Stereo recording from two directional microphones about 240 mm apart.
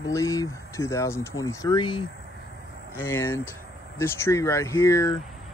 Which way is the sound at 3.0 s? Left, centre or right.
Centre.